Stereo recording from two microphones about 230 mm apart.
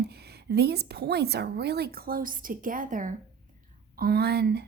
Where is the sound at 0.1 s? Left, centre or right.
Right.